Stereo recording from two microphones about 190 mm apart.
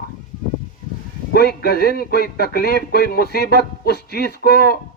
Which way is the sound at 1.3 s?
55° left (ahead or behind).